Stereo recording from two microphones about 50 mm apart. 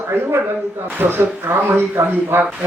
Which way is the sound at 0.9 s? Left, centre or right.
Right.